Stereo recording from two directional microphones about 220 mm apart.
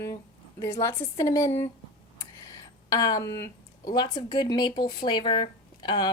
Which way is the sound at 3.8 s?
20° left (ahead or behind).